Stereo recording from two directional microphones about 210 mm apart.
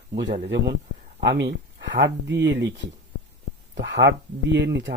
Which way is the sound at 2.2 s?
55° right (ahead or behind).